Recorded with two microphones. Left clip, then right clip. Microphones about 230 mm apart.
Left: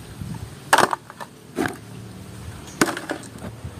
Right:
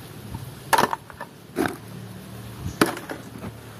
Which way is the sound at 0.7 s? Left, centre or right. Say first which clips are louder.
Left 3 dB; left.